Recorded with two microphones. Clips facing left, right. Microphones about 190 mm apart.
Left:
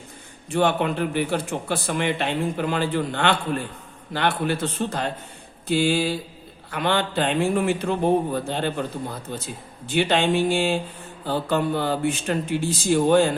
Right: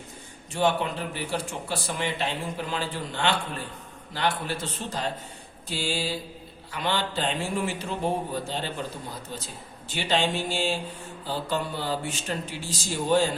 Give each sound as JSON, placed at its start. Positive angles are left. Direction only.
{"t": 0.5, "sound": "a man's voice", "side_deg": 60}